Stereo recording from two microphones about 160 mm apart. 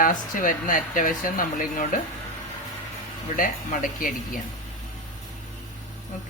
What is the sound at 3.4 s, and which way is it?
Speech, 55° left (ahead or behind).